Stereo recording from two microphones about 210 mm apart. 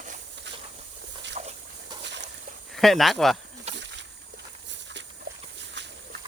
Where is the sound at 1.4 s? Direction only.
35° right (ahead or behind).